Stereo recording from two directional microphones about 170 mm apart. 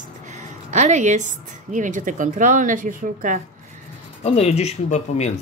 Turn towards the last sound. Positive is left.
turn(degrees=40)  # may be behind; listen again after turning